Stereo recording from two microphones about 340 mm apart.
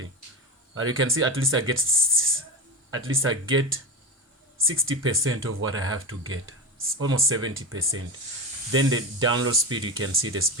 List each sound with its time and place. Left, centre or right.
0.8 s speech: right